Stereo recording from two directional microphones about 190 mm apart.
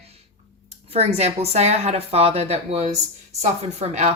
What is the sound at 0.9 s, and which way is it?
Speech, 30° right (ahead or behind).